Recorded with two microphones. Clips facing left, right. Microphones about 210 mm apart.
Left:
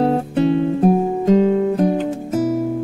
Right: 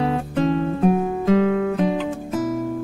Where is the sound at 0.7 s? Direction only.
35° left (ahead or behind).